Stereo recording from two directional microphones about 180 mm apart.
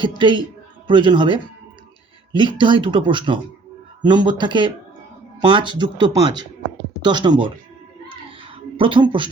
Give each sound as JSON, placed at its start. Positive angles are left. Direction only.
{"t": 0.0, "sound": "speech", "side_deg": -25}
{"t": 8.8, "sound": "speech", "side_deg": -25}